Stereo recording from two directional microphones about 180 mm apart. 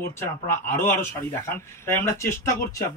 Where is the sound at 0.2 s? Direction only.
15° left (ahead or behind).